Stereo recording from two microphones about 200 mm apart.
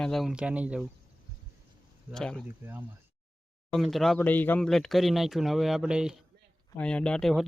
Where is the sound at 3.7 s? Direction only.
Centre (ahead or behind).